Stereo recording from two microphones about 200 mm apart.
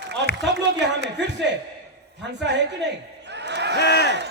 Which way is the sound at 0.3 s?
60° right (ahead or behind).